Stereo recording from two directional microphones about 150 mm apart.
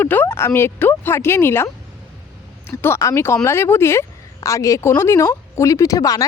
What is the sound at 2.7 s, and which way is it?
Speech, 15° left (ahead or behind).